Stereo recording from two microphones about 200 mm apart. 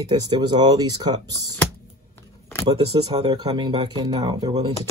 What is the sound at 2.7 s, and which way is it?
A man's voice, 30° right (ahead or behind).